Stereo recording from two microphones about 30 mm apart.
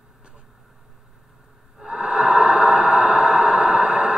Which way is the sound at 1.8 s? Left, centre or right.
Right.